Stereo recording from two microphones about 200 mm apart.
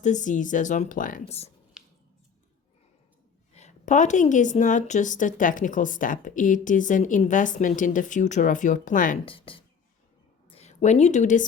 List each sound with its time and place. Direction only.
0.0 s a woman's voice: 40° left (ahead or behind)
1.8 s a sound: 5° right (ahead or behind)
3.5 s a woman's voice: 35° left (ahead or behind)
9.2 s speech: 25° left (ahead or behind)